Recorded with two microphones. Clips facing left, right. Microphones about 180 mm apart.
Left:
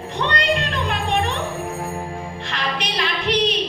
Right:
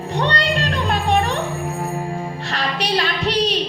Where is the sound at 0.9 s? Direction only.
40° right (ahead or behind).